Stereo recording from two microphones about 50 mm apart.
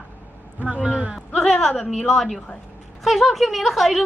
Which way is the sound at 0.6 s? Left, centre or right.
Right.